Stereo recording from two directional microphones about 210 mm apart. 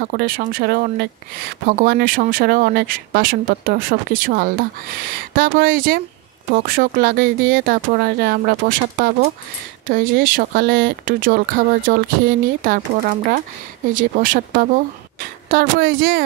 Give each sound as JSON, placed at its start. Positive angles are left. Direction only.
{"t": 0.0, "sound": "speech", "side_deg": -45}